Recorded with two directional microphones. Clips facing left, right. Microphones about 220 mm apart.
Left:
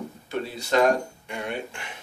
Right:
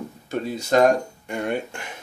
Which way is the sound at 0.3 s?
45° right (ahead or behind).